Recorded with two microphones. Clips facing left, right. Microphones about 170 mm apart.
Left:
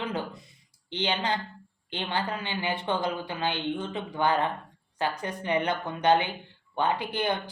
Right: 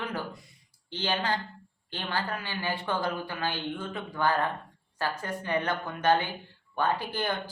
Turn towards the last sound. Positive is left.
turn(degrees=20)  # may be behind; listen again after turning